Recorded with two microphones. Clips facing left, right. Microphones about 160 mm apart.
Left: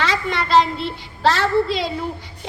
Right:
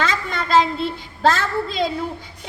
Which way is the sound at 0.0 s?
50° right (ahead or behind).